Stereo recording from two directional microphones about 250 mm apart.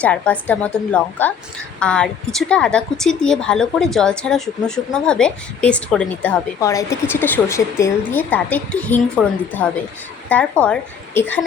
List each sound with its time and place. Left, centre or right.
0.0 s a woman's voice: centre